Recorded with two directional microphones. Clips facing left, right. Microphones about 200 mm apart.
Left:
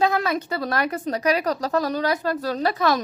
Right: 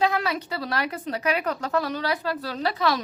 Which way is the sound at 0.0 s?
45° left (ahead or behind).